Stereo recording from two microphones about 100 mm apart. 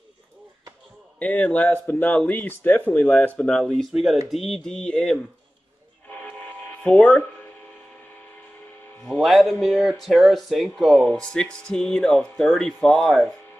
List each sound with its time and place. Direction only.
1.2 s speech: 15° left (ahead or behind)
3.3 s speech: 5° left (ahead or behind)
6.8 s speech: 5° left (ahead or behind)
9.0 s speech: centre (ahead or behind)